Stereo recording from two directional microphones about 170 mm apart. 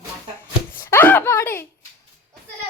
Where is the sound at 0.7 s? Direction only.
15° left (ahead or behind).